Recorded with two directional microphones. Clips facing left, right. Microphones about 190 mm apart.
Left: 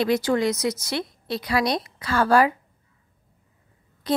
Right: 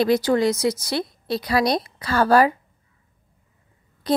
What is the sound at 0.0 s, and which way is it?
A woman's voice, 35° right (ahead or behind).